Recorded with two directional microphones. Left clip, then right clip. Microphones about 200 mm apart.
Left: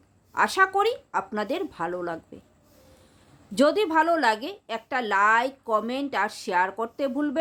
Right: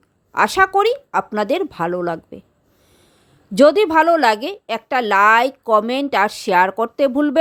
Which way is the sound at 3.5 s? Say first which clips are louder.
Right 9 dB; 35° right (ahead or behind).